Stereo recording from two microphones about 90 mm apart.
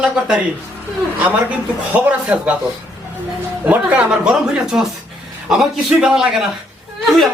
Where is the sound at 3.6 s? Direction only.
15° right (ahead or behind).